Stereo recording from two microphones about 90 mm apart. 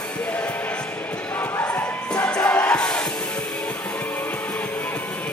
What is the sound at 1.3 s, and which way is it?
Basketball bounce, 25° left (ahead or behind).